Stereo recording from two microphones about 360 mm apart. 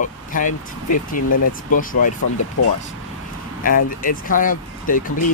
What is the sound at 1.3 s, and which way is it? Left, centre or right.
Speech, left.